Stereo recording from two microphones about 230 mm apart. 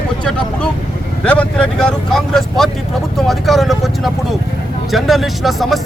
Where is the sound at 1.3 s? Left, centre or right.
Centre.